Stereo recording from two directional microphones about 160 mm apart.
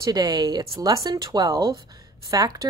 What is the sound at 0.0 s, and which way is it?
Speech, 25° right (ahead or behind).